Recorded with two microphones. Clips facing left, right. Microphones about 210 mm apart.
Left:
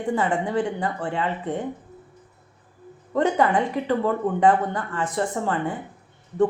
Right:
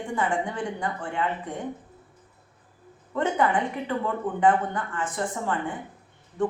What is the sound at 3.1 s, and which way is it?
Speech, 40° left (ahead or behind).